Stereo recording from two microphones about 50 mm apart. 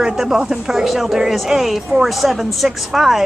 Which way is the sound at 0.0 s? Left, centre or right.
Centre.